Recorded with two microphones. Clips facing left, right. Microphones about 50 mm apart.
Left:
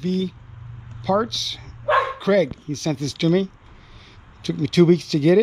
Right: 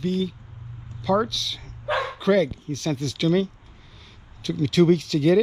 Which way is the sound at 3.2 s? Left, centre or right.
Left.